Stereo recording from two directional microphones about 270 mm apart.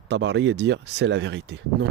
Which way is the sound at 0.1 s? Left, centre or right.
Right.